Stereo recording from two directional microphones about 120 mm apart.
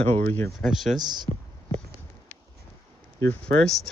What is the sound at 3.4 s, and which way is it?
Speech, 5° left (ahead or behind).